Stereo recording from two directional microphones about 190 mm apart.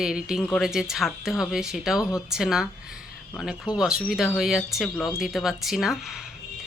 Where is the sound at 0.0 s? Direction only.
5° right (ahead or behind).